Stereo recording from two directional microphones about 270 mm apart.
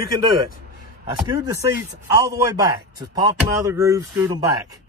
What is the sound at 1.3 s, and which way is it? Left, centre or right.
Speech, centre.